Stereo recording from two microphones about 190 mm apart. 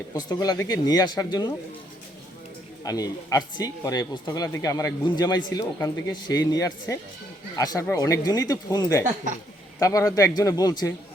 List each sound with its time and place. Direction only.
0.1 s speech: 20° left (ahead or behind)
2.8 s a man's voice: 20° left (ahead or behind)